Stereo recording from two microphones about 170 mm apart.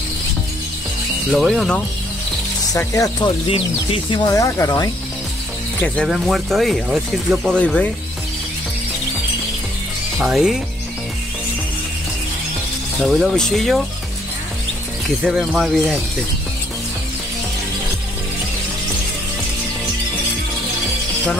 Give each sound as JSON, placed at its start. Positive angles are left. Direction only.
{"t": 1.3, "sound": "speech", "side_deg": 0}
{"t": 2.8, "sound": "speech", "side_deg": 20}
{"t": 4.3, "sound": "speech", "side_deg": 20}
{"t": 6.0, "sound": "speech", "side_deg": 0}
{"t": 10.1, "sound": "speech", "side_deg": 0}
{"t": 13.0, "sound": "speech", "side_deg": 0}
{"t": 15.0, "sound": "speech", "side_deg": 0}